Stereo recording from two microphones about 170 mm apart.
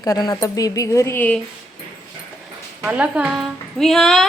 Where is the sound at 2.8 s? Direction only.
5° right (ahead or behind).